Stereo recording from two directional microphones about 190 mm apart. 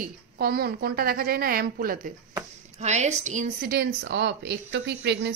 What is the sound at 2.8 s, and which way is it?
A woman's voice, 35° right (ahead or behind).